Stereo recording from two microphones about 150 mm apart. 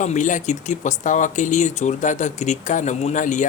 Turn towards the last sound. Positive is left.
turn(degrees=55)  # may be behind; listen again after turning